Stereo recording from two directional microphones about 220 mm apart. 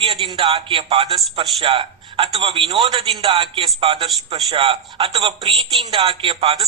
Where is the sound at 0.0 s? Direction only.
25° right (ahead or behind).